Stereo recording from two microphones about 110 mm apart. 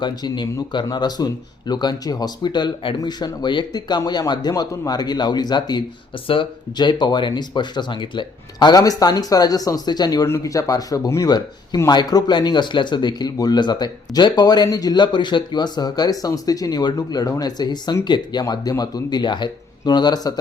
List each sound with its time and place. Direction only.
0.0 s speech: 45° left (ahead or behind)
10.2 s speech: 25° left (ahead or behind)